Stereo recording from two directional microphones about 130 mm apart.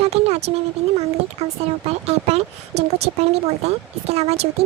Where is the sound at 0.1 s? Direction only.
55° right (ahead or behind).